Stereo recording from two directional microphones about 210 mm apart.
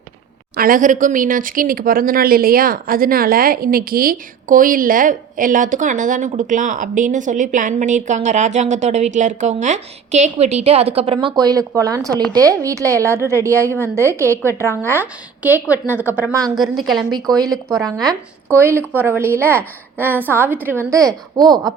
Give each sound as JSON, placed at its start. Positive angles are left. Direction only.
{"t": 0.5, "sound": "a woman's voice", "side_deg": -45}
{"t": 17.1, "sound": "speech", "side_deg": -20}
{"t": 17.4, "sound": "speech", "side_deg": 0}
{"t": 18.9, "sound": "a woman's voice", "side_deg": -10}